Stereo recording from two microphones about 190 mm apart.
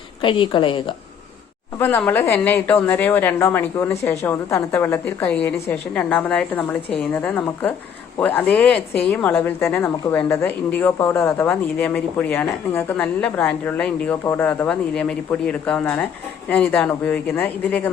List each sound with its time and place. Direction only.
0.2 s a woman's voice: 25° left (ahead or behind)
1.8 s a woman's voice: 10° left (ahead or behind)